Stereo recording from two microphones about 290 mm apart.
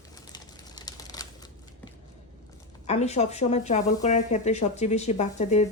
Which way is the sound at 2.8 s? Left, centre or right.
Left.